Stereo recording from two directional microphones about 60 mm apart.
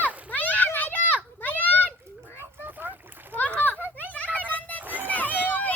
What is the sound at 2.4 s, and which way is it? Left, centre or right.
Splash, right.